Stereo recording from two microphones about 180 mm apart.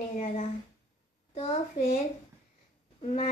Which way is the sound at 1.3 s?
35° left (ahead or behind).